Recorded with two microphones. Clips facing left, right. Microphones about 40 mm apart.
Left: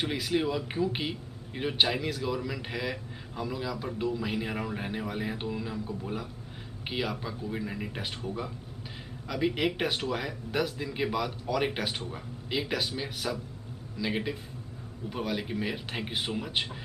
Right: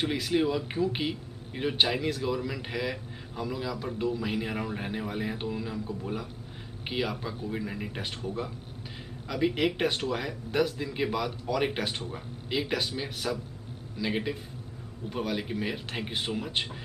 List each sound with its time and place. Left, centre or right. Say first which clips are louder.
0.0 s a man's voice: right 2 dB; centre
9.3 s a man's voice: right 1 dB; centre